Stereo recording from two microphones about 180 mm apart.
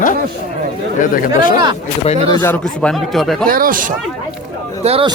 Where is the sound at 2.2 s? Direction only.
25° left (ahead or behind).